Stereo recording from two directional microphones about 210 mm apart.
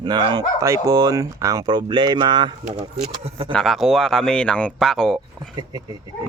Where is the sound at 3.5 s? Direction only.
Centre (ahead or behind).